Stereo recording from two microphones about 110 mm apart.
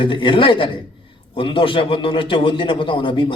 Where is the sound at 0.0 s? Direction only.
50° left (ahead or behind).